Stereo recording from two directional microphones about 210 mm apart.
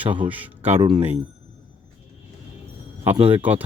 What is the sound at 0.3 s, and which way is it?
Speech, 5° right (ahead or behind).